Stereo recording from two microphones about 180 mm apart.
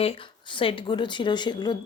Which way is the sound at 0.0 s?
30° left (ahead or behind).